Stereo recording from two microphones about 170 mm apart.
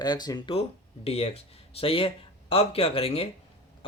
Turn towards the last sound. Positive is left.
turn(degrees=35)  # may be behind; listen again after turning